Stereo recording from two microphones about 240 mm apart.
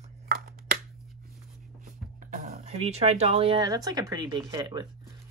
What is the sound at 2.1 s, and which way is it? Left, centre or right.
Speech, right.